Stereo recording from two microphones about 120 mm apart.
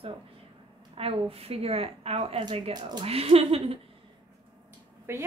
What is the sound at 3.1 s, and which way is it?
Speech, 55° right (ahead or behind).